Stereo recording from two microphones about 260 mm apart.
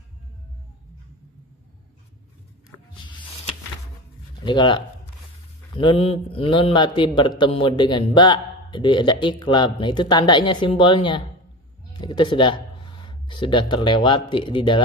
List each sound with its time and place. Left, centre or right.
4.5 s a man's voice: centre
5.8 s a man's voice: centre